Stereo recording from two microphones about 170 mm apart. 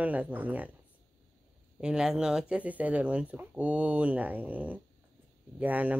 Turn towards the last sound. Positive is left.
turn(degrees=-10)  # may be behind; listen again after turning